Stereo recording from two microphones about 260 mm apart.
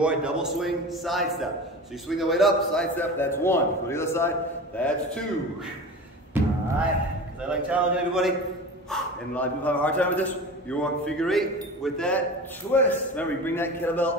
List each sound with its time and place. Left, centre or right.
0.0 s a man's voice: centre
6.4 s music: centre
7.4 s a man's voice: centre